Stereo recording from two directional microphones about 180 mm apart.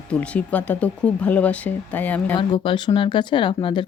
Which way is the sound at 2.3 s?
25° left (ahead or behind).